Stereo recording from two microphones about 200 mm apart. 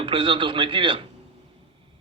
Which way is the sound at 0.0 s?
25° right (ahead or behind).